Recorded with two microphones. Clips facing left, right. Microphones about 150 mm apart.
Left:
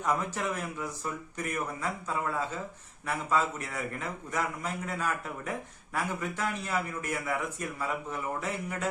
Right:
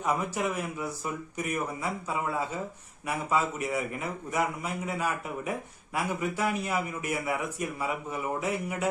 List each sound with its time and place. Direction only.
0.0 s a man's voice: 10° right (ahead or behind)